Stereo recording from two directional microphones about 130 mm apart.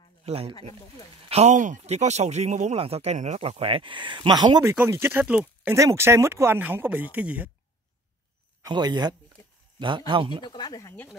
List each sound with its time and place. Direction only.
0.2 s speech: 50° right (ahead or behind)
1.3 s speech: 65° right (ahead or behind); by 4.7 s 30° right (ahead or behind)
4.7 s speech: 20° right (ahead or behind)
5.2 s speech: 10° right (ahead or behind)
5.8 s speech: 20° right (ahead or behind)
8.6 s speech: 30° right (ahead or behind)
10.4 s speech: 35° left (ahead or behind)